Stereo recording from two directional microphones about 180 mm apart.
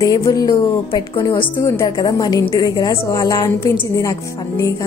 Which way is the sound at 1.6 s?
20° left (ahead or behind).